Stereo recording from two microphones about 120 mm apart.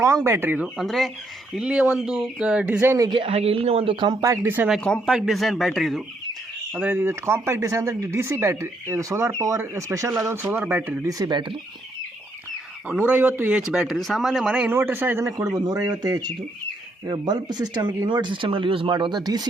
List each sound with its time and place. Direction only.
0.0 s speech: 25° right (ahead or behind)
0.9 s a man's voice: centre (ahead or behind); by 3.1 s 20° right (ahead or behind)
3.1 s speech: 50° right (ahead or behind)
4.2 s speech: 20° right (ahead or behind)
5.0 s a man's voice: 5° right (ahead or behind)
6.7 s speech: 15° right (ahead or behind)
11.2 s speech: 40° right (ahead or behind)
12.9 s speech: 10° right (ahead or behind); by 19.5 s 35° right (ahead or behind)